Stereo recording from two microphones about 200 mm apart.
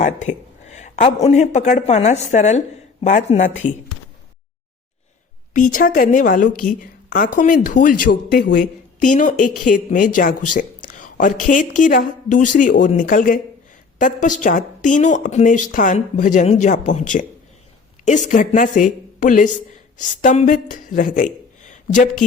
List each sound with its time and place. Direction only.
0.0 s speech: 40° left (ahead or behind)
5.5 s a woman's voice: 40° left (ahead or behind)